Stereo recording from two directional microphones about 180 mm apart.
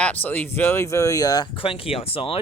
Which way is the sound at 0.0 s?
10° left (ahead or behind).